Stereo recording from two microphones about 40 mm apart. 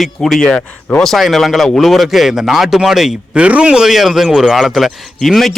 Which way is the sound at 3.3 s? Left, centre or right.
Right.